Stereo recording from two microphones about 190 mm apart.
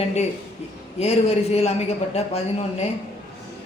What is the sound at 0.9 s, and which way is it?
Speech, 30° left (ahead or behind).